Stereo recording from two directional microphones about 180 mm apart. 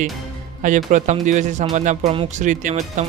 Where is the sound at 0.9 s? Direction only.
45° right (ahead or behind).